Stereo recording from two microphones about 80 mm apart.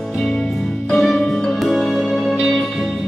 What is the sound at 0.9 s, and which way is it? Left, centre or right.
Music, centre.